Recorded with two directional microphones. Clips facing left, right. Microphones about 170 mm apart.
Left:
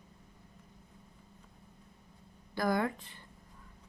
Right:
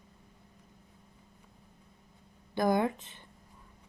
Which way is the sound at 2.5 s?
20° right (ahead or behind).